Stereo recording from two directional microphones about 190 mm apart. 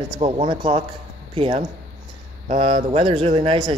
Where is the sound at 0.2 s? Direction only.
30° right (ahead or behind).